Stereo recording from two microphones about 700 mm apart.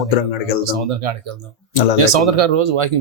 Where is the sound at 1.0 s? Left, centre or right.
Right.